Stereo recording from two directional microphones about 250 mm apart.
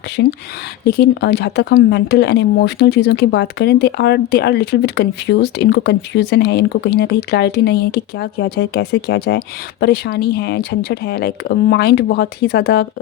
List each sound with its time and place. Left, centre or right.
0.2 s speech: left